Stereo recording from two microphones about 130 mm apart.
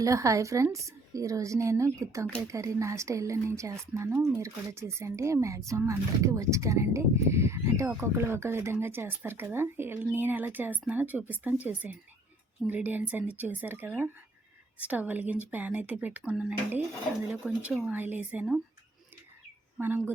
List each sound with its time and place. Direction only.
0.0 s speech: 25° right (ahead or behind); by 18.6 s 10° right (ahead or behind)
19.8 s speech: 15° right (ahead or behind)